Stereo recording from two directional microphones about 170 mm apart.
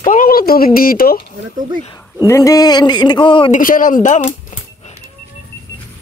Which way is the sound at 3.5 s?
50° left (ahead or behind).